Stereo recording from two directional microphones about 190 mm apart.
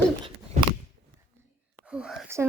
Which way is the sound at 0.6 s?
40° right (ahead or behind).